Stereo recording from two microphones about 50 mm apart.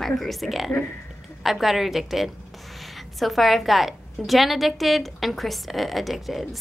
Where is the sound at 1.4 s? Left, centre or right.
Centre.